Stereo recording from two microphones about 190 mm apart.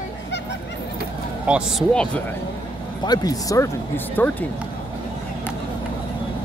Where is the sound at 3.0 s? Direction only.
20° left (ahead or behind).